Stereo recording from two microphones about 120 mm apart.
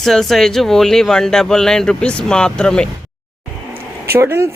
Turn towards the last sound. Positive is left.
turn(degrees=-20)  # may be behind; listen again after turning